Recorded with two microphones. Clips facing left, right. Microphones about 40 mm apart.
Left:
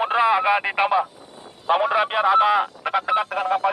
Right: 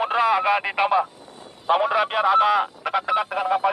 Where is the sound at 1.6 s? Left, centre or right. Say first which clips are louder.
Even; centre.